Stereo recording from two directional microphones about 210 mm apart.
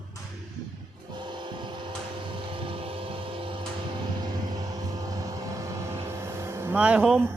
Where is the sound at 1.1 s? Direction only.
20° right (ahead or behind).